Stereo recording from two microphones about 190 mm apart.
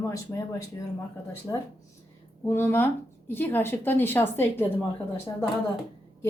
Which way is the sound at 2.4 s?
15° left (ahead or behind).